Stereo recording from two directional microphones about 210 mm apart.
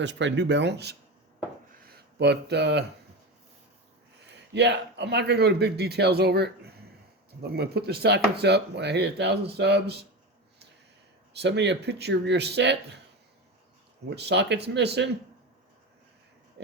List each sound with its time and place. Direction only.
0.0 s speech: 60° right (ahead or behind)
2.1 s speech: 55° right (ahead or behind)
4.5 s speech: 55° right (ahead or behind)
11.3 s speech: 55° right (ahead or behind)
14.2 s speech: 55° right (ahead or behind)